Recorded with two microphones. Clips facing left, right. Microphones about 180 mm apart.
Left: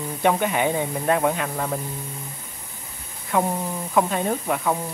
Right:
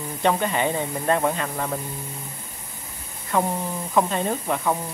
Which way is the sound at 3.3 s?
5° left (ahead or behind).